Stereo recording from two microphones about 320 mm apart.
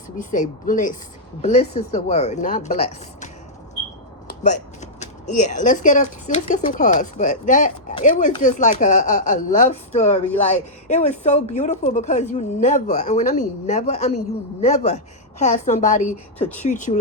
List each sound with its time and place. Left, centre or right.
0.2 s speech: left
4.4 s speech: left